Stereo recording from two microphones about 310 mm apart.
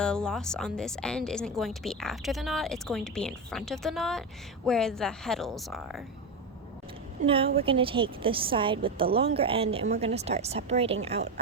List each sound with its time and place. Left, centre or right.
0.0 s a woman's voice: centre
7.3 s a woman's voice: centre